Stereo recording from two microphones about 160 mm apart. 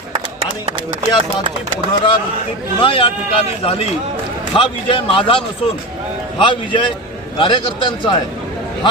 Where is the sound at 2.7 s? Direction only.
30° left (ahead or behind).